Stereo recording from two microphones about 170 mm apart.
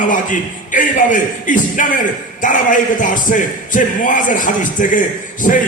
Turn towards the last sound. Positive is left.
turn(degrees=50)  # may be behind; listen again after turning